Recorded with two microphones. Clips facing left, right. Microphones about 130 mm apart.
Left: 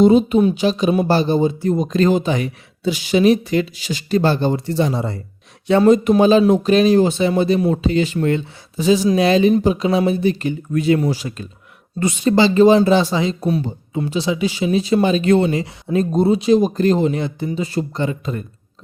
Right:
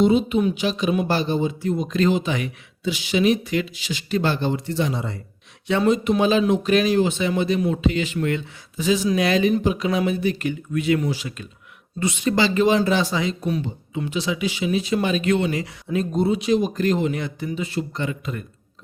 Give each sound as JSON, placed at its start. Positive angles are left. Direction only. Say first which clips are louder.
{"t": 0.0, "sound": "speech", "louder": "left 6 dB", "side_deg": 40}